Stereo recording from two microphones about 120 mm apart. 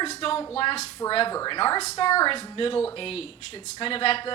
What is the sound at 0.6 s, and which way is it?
A woman's voice, 50° left (ahead or behind).